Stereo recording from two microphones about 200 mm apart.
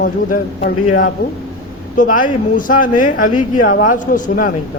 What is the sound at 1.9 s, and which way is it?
Speech, 40° left (ahead or behind).